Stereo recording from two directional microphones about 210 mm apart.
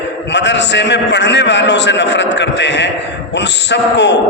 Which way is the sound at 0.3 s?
55° left (ahead or behind).